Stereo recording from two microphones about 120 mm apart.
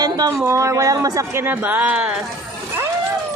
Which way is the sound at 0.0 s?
35° right (ahead or behind).